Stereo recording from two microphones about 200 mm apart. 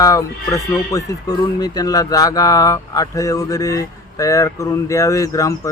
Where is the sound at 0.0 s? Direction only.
15° left (ahead or behind).